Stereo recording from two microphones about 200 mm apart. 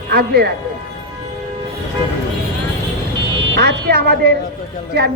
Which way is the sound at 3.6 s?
55° right (ahead or behind).